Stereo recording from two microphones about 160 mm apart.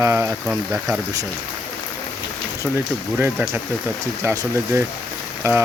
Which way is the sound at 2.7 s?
15° right (ahead or behind).